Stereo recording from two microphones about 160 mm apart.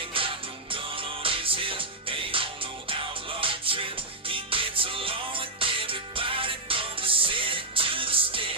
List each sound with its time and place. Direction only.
0.1 s music: 35° right (ahead or behind)